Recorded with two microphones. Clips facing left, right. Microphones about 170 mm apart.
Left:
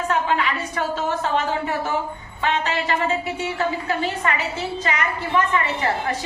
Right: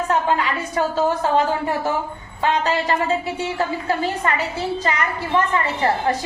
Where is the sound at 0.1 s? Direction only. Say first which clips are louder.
Right 2 dB; 40° right (ahead or behind).